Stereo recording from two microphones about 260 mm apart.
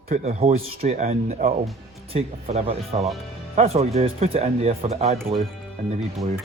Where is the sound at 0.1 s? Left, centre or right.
Right.